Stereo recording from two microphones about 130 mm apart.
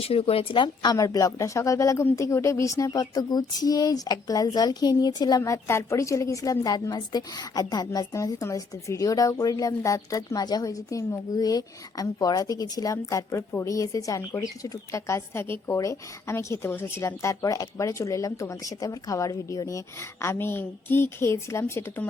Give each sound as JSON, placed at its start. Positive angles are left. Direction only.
{"t": 0.0, "sound": "speech", "side_deg": 50}